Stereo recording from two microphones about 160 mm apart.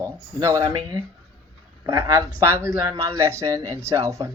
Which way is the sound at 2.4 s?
15° right (ahead or behind).